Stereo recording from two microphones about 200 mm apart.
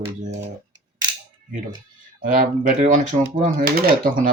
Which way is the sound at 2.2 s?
40° right (ahead or behind).